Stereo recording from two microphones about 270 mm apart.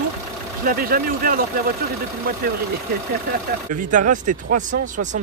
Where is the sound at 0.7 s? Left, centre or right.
Right.